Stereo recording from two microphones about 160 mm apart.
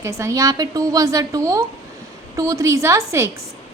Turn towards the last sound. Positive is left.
turn(degrees=-20)  # may be behind; listen again after turning